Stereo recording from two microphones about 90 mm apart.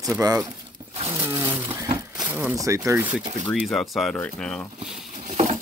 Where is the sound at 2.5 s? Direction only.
40° right (ahead or behind).